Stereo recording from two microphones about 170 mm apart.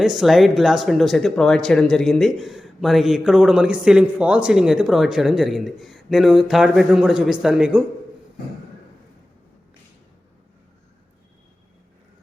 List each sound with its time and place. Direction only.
0.0 s speech: centre (ahead or behind)